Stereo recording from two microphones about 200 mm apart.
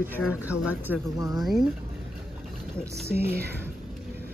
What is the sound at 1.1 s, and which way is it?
Speech, 20° right (ahead or behind).